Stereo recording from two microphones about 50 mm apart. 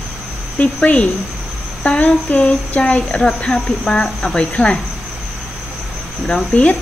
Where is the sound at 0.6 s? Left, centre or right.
Left.